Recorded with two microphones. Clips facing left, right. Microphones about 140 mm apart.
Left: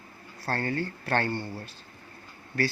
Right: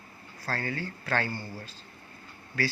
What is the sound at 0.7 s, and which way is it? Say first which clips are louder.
Speech: left 4 dB; 55° left (ahead or behind).